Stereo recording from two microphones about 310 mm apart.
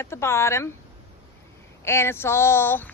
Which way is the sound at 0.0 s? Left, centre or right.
Centre.